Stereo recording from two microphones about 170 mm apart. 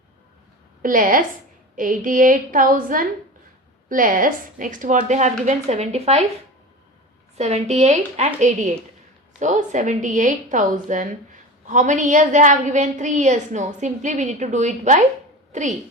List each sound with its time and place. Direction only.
0.8 s a woman's voice: 50° right (ahead or behind)
7.3 s a woman's voice: 40° right (ahead or behind)